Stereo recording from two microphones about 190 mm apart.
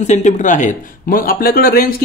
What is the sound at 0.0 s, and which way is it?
Speech, 35° left (ahead or behind).